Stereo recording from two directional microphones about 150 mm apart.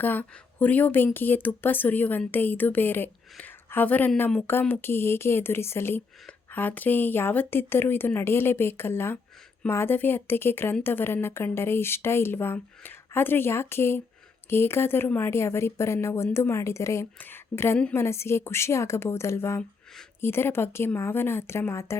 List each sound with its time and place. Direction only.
0.0 s a woman's voice: 10° left (ahead or behind)